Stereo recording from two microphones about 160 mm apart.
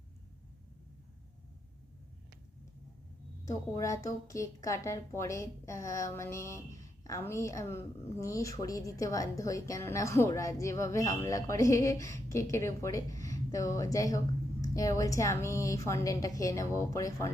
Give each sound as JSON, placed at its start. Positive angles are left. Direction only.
{"t": 3.4, "sound": "a woman's voice", "side_deg": 20}